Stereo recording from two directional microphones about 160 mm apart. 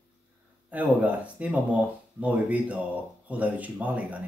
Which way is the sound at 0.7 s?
10° right (ahead or behind).